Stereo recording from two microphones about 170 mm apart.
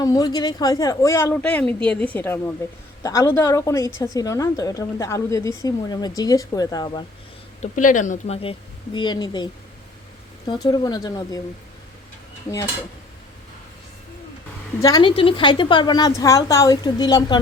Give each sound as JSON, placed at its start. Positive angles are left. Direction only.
{"t": 0.0, "sound": "a woman's voice", "side_deg": 20}
{"t": 7.6, "sound": "a woman's voice", "side_deg": 50}
{"t": 14.8, "sound": "a woman's voice", "side_deg": 25}